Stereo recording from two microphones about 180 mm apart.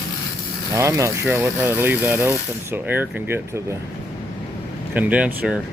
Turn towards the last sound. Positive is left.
turn(degrees=-5)  # may be behind; listen again after turning